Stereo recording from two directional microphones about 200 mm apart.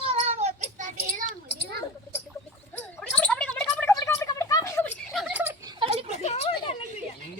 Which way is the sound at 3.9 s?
15° left (ahead or behind).